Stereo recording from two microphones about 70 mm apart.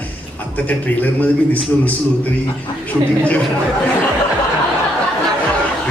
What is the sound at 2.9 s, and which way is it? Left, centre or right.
Speech, left.